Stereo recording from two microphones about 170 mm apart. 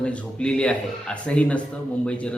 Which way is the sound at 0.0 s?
5° left (ahead or behind).